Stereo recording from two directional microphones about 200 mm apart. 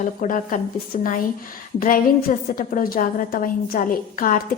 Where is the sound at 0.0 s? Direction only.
40° left (ahead or behind).